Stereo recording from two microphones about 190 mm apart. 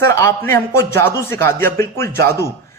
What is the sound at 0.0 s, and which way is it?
Speech, 15° left (ahead or behind).